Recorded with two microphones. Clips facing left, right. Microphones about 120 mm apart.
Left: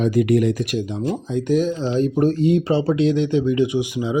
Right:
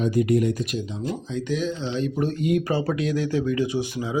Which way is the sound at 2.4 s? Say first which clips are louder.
Left 5 dB; 25° left (ahead or behind).